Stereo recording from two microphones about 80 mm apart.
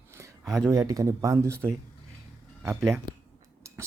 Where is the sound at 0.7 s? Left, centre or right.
Right.